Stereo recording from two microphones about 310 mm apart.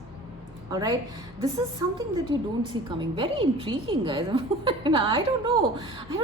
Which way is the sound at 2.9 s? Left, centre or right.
Centre.